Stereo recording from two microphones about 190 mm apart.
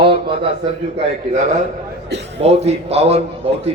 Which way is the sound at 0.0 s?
25° right (ahead or behind).